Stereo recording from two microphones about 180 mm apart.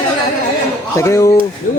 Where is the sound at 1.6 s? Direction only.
50° left (ahead or behind).